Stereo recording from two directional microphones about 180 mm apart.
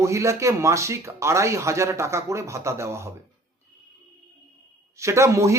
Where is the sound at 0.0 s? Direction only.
15° right (ahead or behind).